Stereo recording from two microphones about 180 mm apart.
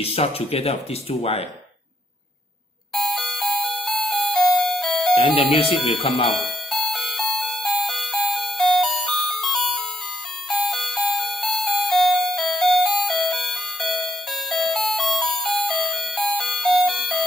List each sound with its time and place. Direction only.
0.0 s speech: 35° left (ahead or behind)
2.9 s music: centre (ahead or behind)
5.1 s speech: 30° left (ahead or behind)
6.3 s doorbell: centre (ahead or behind)
10.5 s music: centre (ahead or behind)